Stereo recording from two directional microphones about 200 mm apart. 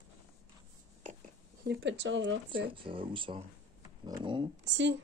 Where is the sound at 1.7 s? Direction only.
65° right (ahead or behind).